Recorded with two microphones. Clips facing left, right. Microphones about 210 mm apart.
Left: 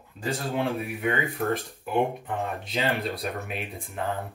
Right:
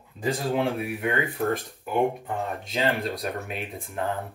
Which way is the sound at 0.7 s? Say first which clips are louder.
Right 1 dB; centre (ahead or behind).